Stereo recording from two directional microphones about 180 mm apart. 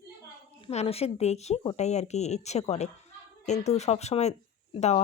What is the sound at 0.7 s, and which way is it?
A woman's voice, 35° left (ahead or behind).